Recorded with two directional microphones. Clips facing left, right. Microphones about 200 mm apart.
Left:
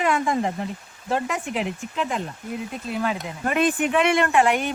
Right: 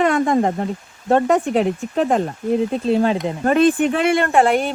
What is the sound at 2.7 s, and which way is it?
A woman's voice, 30° right (ahead or behind).